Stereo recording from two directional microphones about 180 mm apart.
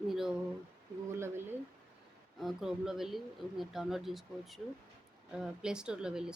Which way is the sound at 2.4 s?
Centre (ahead or behind).